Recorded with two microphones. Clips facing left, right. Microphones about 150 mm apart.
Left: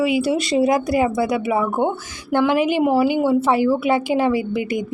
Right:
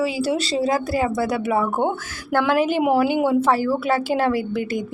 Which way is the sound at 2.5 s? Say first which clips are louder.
Right 1 dB; 15° left (ahead or behind).